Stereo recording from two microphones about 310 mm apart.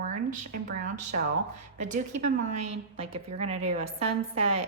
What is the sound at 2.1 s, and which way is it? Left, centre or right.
Speech, right.